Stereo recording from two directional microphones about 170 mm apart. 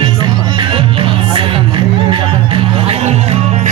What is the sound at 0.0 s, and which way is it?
Music, 25° right (ahead or behind).